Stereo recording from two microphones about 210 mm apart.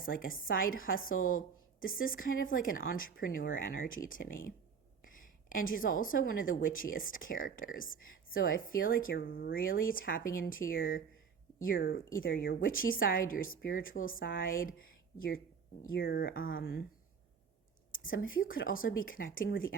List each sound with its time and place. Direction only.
0.0 s a woman's voice: 40° left (ahead or behind)
15.9 s a woman's voice: 45° left (ahead or behind)
18.1 s a woman's voice: 40° left (ahead or behind)